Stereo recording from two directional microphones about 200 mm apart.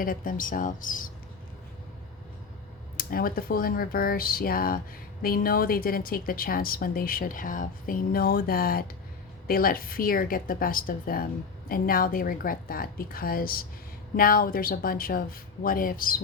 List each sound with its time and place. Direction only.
0.0 s a woman's voice: 45° left (ahead or behind)
3.0 s a woman's voice: 45° left (ahead or behind)